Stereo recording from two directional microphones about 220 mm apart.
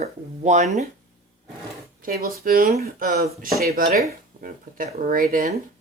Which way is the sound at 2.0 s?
40° right (ahead or behind).